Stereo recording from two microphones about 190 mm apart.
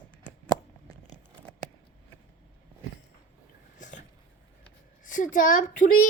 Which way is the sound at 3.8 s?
40° left (ahead or behind).